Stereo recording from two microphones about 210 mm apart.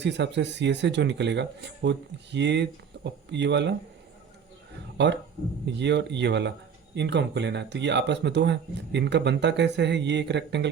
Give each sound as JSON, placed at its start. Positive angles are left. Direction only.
{"t": 0.0, "sound": "speech", "side_deg": -55}
{"t": 5.0, "sound": "speech", "side_deg": -55}